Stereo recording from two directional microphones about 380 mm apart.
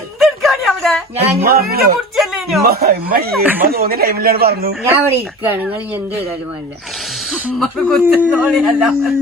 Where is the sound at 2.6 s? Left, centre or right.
Right.